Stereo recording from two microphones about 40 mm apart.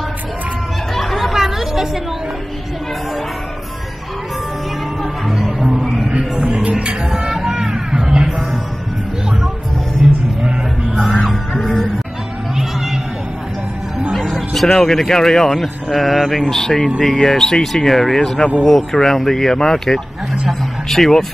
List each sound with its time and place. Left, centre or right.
0.9 s chatter: centre
1.3 s chatter: centre
6.0 s a sound: right
7.1 s music: centre
11.1 s music: centre
14.2 s music: centre
14.7 s speech: centre
16.4 s speech: centre
20.4 s a sound: centre